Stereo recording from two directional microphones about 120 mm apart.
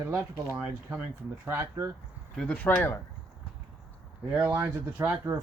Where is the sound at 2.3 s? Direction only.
10° left (ahead or behind).